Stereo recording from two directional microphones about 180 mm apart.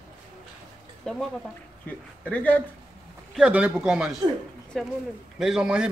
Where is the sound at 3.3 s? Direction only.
5° right (ahead or behind).